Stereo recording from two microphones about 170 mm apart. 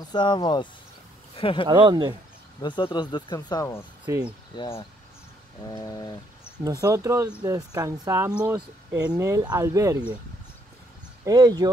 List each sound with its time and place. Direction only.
0.1 s speech: 25° left (ahead or behind)
1.7 s speech: 25° right (ahead or behind)
2.6 s speech: 25° left (ahead or behind)
4.1 s speech: 15° right (ahead or behind)
4.6 s speech: 35° left (ahead or behind)
5.6 s a sound: 25° left (ahead or behind)
6.6 s speech: 20° right (ahead or behind)
11.2 s speech: 20° right (ahead or behind)